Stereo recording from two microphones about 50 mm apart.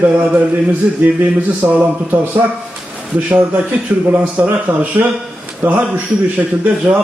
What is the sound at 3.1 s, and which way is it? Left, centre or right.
Speech, right.